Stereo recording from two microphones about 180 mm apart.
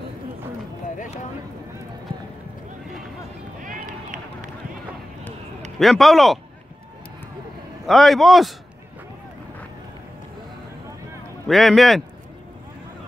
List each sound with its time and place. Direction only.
0.9 s a sound: 45° left (ahead or behind)
3.6 s run: 50° right (ahead or behind)
5.8 s a man's voice: centre (ahead or behind)
7.8 s a man's voice: centre (ahead or behind)
11.4 s a man's voice: centre (ahead or behind)